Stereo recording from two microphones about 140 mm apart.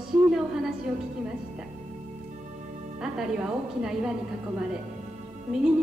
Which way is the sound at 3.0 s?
5° right (ahead or behind).